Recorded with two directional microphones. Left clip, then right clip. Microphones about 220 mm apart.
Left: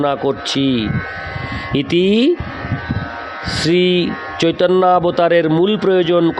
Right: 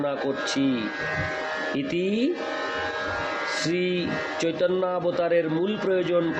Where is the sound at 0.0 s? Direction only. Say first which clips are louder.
Left 9 dB; 50° left (ahead or behind).